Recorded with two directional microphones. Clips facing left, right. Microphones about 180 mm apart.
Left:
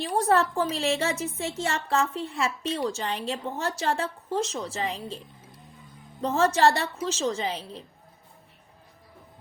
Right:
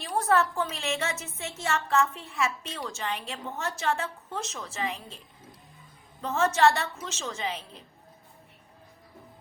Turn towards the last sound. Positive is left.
turn(degrees=35)  # may be behind; listen again after turning